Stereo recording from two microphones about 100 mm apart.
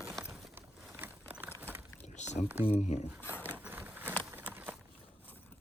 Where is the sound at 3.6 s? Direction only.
20° right (ahead or behind).